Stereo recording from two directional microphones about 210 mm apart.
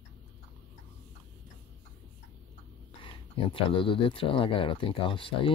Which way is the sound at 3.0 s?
25° left (ahead or behind).